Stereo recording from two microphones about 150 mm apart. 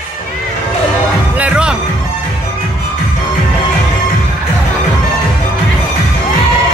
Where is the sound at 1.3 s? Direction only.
10° right (ahead or behind).